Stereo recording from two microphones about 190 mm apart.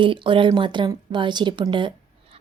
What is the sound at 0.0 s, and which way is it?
A woman's voice, 25° right (ahead or behind).